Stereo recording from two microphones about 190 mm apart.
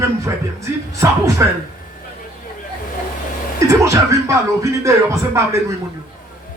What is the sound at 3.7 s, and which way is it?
Speech, 15° right (ahead or behind).